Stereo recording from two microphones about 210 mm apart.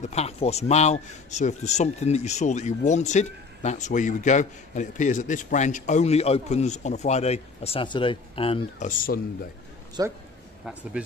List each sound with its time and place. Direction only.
0.0 s speech: 30° left (ahead or behind)
10.0 s a man's voice: 20° right (ahead or behind)
10.6 s speech: 5° right (ahead or behind)